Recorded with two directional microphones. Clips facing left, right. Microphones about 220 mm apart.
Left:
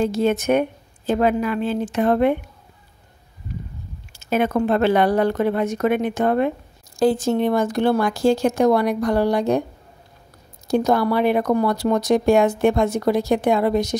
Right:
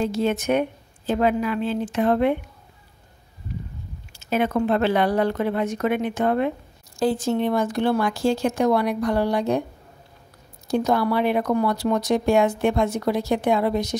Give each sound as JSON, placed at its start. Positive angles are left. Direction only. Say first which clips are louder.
{"t": 0.0, "sound": "speech", "louder": "left 3 dB", "side_deg": 50}
{"t": 4.2, "sound": "speech", "louder": "left 2 dB", "side_deg": 45}
{"t": 10.7, "sound": "speech", "louder": "left 3 dB", "side_deg": 45}